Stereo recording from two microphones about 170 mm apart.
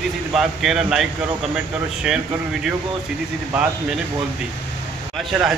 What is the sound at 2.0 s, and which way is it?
Speech, 5° right (ahead or behind).